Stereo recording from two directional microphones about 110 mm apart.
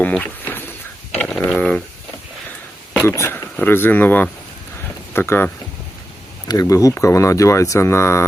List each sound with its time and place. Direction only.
0.0 s a sound: 15° left (ahead or behind)
1.2 s ratchet: 10° left (ahead or behind)
3.1 s speech: 25° left (ahead or behind)
6.5 s speech: 30° left (ahead or behind)